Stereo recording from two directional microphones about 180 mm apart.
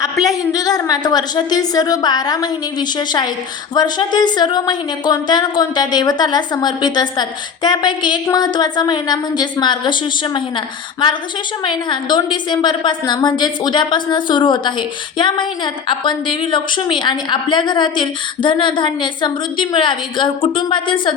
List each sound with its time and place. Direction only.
0.0 s a woman's voice: 20° left (ahead or behind)
11.6 s a woman's voice: 25° left (ahead or behind)